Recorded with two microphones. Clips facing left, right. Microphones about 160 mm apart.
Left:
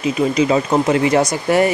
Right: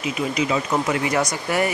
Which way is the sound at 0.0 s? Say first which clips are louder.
Left 7 dB; 30° left (ahead or behind).